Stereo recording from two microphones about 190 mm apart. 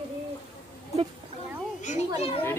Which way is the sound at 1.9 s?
40° left (ahead or behind).